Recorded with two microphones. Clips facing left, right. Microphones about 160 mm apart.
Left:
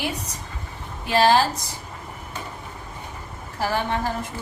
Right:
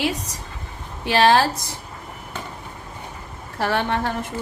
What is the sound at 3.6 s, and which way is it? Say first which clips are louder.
Speech: right 2 dB; 70° right (ahead or behind).